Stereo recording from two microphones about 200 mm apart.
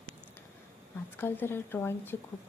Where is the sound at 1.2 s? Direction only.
10° left (ahead or behind).